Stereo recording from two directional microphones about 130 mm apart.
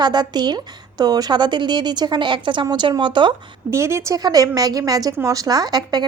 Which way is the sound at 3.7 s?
20° right (ahead or behind).